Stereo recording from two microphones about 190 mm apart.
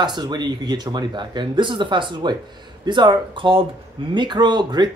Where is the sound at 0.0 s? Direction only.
20° right (ahead or behind).